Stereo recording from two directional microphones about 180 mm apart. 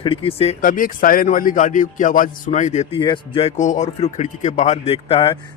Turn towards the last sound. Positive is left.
turn(degrees=30)  # may be behind; listen again after turning